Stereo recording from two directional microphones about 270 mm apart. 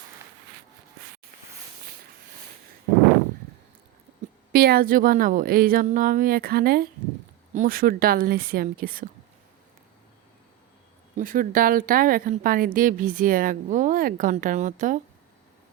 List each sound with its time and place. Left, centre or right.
4.5 s speech: right
11.2 s speech: right